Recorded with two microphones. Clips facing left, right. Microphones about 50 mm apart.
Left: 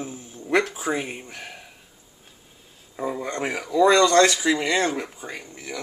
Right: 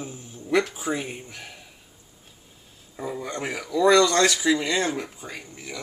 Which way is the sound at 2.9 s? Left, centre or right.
Centre.